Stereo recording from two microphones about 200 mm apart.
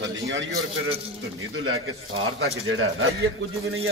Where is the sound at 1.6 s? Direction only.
90° right.